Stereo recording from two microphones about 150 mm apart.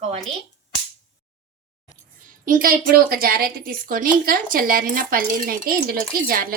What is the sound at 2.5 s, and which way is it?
A woman's voice, 70° right (ahead or behind).